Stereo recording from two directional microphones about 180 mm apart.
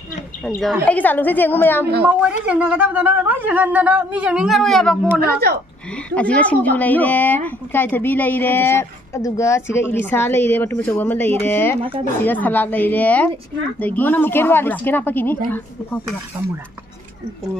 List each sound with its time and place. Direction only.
0.6 s a woman's voice: 5° left (ahead or behind)
2.0 s speech: 5° right (ahead or behind)
5.2 s speech: 60° right (ahead or behind)
6.0 s a woman's voice: 5° left (ahead or behind)